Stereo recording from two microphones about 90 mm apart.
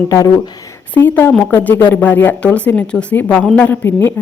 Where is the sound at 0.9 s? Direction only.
20° left (ahead or behind).